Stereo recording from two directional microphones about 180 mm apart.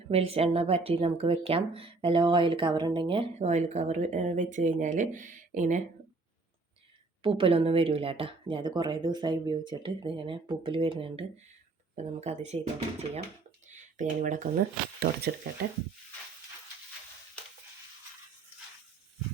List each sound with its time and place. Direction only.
0.1 s speech: 35° right (ahead or behind)
7.2 s speech: 30° right (ahead or behind); by 14.6 s 45° right (ahead or behind)
15.5 s speech: 60° right (ahead or behind)